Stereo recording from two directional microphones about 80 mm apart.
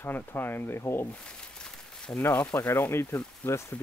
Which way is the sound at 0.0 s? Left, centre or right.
Left.